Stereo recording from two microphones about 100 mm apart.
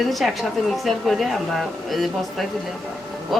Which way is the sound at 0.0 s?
Centre (ahead or behind).